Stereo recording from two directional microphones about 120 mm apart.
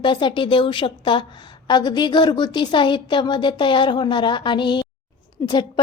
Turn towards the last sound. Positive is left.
turn(degrees=40)  # may be behind; listen again after turning